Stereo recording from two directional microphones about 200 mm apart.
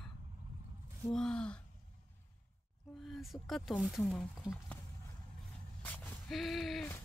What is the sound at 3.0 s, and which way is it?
Speech, centre (ahead or behind).